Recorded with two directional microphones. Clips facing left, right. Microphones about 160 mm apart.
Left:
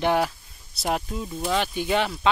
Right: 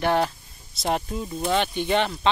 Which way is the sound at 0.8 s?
Centre (ahead or behind).